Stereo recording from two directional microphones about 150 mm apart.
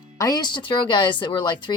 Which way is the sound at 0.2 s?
25° left (ahead or behind).